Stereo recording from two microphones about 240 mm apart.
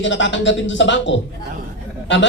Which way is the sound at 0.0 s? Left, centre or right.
Left.